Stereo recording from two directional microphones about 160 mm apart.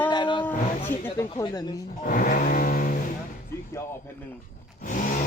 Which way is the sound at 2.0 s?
60° left (ahead or behind).